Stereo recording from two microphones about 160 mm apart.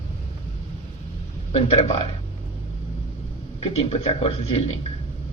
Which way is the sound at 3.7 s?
40° left (ahead or behind).